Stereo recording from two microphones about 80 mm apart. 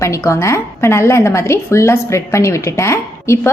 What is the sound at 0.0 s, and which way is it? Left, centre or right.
A woman's voice, left.